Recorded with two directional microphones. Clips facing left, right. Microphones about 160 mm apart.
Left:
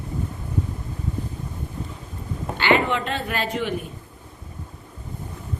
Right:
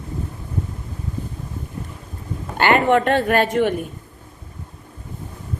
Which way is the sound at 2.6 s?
50° right (ahead or behind).